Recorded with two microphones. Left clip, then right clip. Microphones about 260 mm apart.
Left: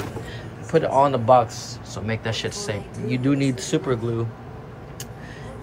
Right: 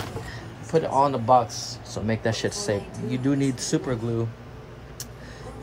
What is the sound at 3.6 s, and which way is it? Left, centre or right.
Speech, right.